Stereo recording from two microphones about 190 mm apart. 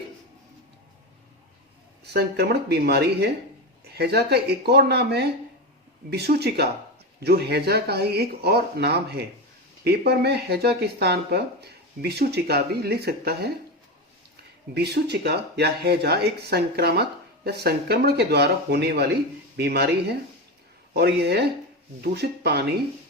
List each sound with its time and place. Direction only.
2.1 s speech: 55° right (ahead or behind)
14.7 s speech: 60° right (ahead or behind)